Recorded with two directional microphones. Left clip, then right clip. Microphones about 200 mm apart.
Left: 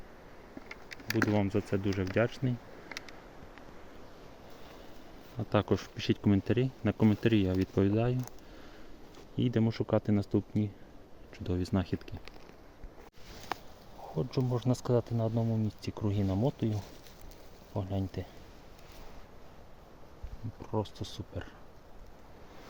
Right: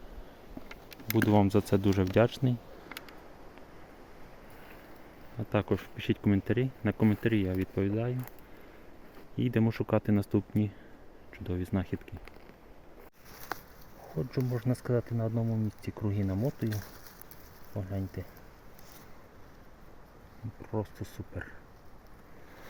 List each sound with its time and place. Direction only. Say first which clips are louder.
0.7 s speech: right 2 dB; 30° right (ahead or behind)
5.4 s speech: left 1 dB; 5° left (ahead or behind)
9.5 s speech: right 1 dB; 10° right (ahead or behind)
11.3 s speech: left 1 dB; 5° left (ahead or behind)
14.3 s speech: left 1 dB; 5° left (ahead or behind)
17.7 s speech: left 2 dB; 15° left (ahead or behind)
20.6 s speech: left 1 dB; 15° left (ahead or behind)